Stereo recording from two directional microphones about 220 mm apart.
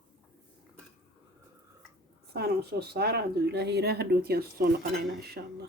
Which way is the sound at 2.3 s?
45° right (ahead or behind).